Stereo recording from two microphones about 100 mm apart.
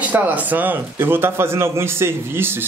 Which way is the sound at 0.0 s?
15° right (ahead or behind).